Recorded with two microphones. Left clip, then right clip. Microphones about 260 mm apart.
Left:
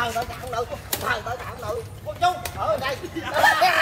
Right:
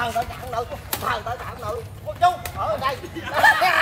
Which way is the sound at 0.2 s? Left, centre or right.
Right.